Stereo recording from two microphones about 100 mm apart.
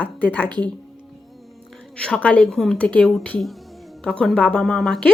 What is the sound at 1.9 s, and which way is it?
Speech, 10° left (ahead or behind).